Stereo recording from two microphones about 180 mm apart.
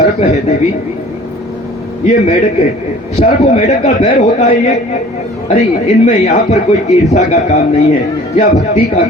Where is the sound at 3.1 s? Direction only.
35° left (ahead or behind).